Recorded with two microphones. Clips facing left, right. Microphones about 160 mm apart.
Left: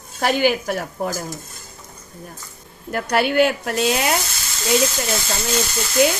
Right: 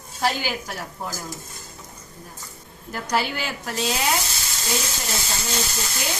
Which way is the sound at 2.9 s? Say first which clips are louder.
Left 8 dB; 65° left (ahead or behind).